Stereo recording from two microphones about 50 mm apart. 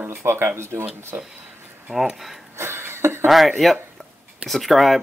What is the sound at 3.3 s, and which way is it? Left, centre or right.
Speech, centre.